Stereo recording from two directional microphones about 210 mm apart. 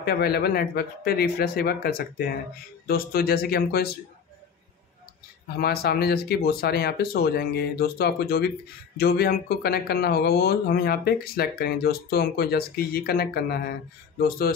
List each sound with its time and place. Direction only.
0.0 s speech: 50° left (ahead or behind)
5.6 s speech: 45° left (ahead or behind)